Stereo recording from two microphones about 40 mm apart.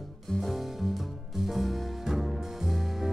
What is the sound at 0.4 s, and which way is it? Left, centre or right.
Music, centre.